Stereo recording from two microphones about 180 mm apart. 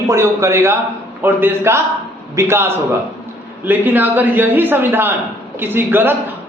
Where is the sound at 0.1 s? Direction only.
15° right (ahead or behind).